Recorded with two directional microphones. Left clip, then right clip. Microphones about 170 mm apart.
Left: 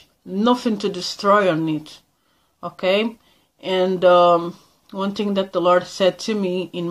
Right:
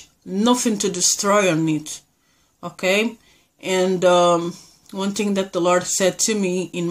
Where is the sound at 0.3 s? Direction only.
15° right (ahead or behind).